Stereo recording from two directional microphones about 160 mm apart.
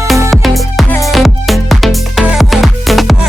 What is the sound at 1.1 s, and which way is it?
Music, centre (ahead or behind).